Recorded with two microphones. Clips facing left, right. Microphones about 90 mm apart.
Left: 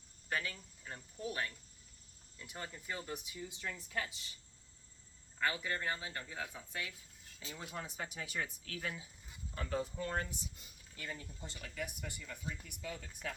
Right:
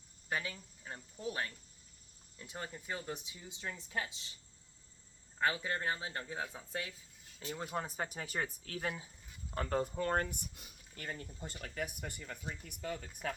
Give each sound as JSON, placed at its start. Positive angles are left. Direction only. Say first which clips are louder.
{"t": 0.3, "sound": "speech", "louder": "right 1 dB", "side_deg": -20}
{"t": 5.4, "sound": "speech", "louder": "right 3 dB", "side_deg": -25}
{"t": 7.3, "sound": "speech", "louder": "right 6 dB", "side_deg": -40}
{"t": 9.6, "sound": "speech", "louder": "right 4 dB", "side_deg": -50}
{"t": 11.0, "sound": "speech", "louder": "right 2 dB", "side_deg": -50}